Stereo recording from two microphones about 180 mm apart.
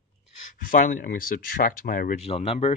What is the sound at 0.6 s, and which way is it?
Speech, 50° left (ahead or behind).